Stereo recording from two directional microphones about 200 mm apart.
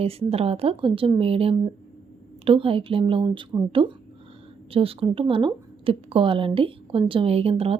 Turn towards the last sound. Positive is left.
turn(degrees=-30)  # may be behind; listen again after turning